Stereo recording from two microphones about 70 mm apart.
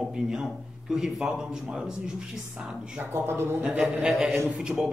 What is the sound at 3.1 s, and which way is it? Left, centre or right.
Speech, right.